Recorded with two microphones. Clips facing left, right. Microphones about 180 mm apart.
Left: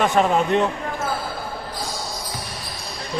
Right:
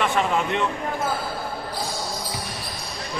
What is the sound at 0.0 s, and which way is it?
Speech, 40° left (ahead or behind).